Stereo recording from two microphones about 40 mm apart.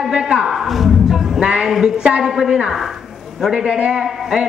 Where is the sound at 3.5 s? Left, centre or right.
Right.